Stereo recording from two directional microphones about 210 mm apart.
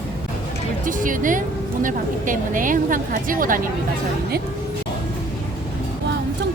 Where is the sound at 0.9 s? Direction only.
40° right (ahead or behind).